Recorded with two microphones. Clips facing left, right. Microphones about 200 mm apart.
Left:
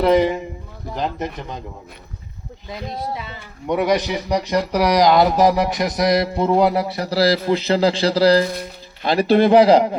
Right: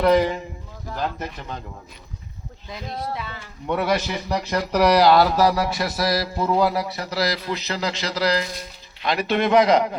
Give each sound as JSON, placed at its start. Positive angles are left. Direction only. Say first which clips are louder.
{"t": 0.0, "sound": "a man's voice", "louder": "left 2 dB", "side_deg": 20}
{"t": 3.7, "sound": "a man's voice", "louder": "left 4 dB", "side_deg": 15}